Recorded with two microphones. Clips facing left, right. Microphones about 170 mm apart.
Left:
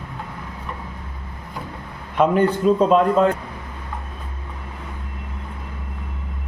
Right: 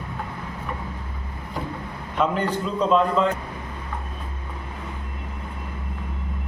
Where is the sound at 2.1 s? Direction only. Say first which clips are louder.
Left 6 dB; 50° left (ahead or behind).